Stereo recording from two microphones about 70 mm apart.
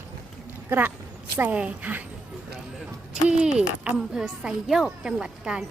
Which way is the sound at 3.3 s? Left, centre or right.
Centre.